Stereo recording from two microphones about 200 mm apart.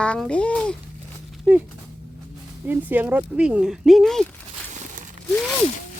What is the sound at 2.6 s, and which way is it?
Speech, 10° right (ahead or behind).